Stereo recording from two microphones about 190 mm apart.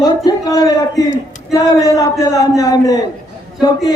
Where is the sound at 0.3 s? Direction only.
20° left (ahead or behind).